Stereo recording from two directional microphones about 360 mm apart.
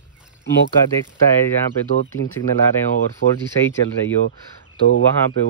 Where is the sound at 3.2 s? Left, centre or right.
Left.